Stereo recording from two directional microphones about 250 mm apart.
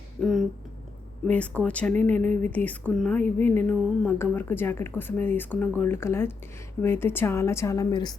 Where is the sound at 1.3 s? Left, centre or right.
Centre.